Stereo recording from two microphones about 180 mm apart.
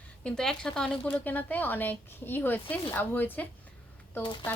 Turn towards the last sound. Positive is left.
turn(degrees=25)  # may be behind; listen again after turning